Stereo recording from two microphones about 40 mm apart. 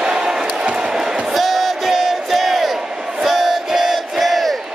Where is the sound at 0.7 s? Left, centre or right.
Centre.